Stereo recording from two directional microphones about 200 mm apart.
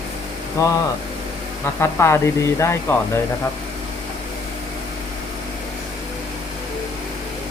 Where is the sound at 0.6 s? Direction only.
15° left (ahead or behind).